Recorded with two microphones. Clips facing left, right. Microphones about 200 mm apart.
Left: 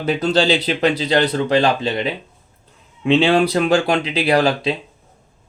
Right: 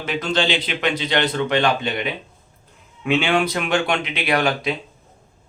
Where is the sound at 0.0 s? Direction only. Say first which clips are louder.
Left 5 dB; 35° left (ahead or behind).